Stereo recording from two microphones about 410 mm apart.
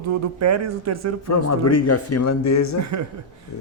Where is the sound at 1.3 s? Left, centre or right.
Left.